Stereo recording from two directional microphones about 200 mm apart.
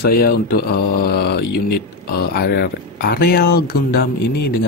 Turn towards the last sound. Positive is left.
turn(degrees=55)  # may be behind; listen again after turning